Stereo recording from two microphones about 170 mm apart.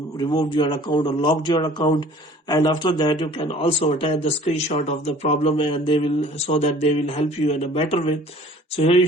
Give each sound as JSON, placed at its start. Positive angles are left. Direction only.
{"t": 0.2, "sound": "speech", "side_deg": 25}